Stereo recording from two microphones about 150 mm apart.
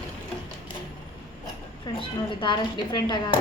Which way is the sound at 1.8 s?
35° left (ahead or behind).